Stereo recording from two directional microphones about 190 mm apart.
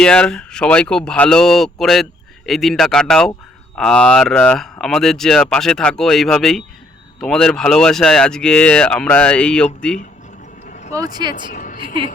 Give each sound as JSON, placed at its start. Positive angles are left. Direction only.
{"t": 0.0, "sound": "speech", "side_deg": 5}
{"t": 10.7, "sound": "vehicle", "side_deg": 35}
{"t": 10.9, "sound": "speech", "side_deg": -20}
{"t": 11.5, "sound": "music", "side_deg": 45}